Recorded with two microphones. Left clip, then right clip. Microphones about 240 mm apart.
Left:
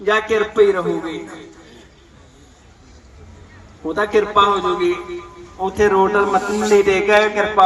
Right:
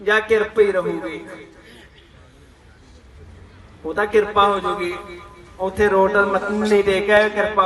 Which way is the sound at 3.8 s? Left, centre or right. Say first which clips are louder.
Left 1 dB; left.